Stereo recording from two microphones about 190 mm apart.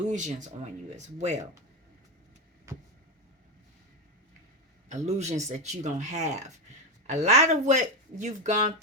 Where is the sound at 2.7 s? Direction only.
15° right (ahead or behind).